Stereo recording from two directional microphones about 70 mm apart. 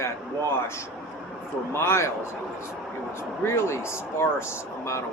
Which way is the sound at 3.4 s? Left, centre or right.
Left.